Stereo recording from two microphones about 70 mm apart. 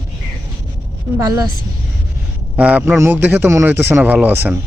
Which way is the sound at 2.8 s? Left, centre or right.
Right.